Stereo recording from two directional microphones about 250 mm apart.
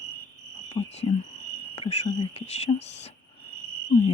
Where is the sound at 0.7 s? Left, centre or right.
Left.